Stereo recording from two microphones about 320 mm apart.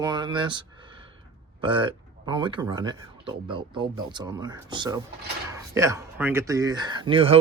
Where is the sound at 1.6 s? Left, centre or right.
Centre.